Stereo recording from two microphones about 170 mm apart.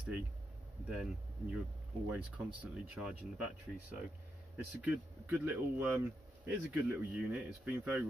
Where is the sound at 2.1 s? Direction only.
5° right (ahead or behind).